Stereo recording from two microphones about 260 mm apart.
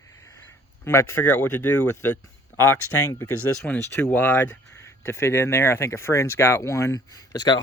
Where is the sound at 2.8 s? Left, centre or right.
Left.